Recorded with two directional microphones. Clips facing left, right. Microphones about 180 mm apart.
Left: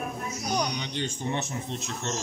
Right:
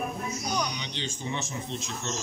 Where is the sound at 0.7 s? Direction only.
50° left (ahead or behind).